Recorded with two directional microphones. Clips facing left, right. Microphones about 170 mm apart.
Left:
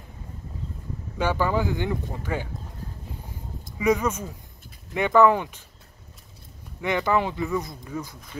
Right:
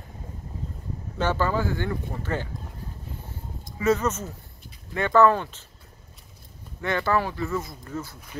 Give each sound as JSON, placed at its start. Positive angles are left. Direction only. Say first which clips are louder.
{"t": 1.1, "sound": "speech", "louder": "left 1 dB", "side_deg": 10}
{"t": 3.8, "sound": "speech", "louder": "even", "side_deg": 15}
{"t": 6.8, "sound": "speech", "louder": "left 1 dB", "side_deg": 15}
{"t": 7.5, "sound": "speech", "louder": "left 2 dB", "side_deg": 0}
{"t": 7.9, "sound": "speech", "louder": "even", "side_deg": 15}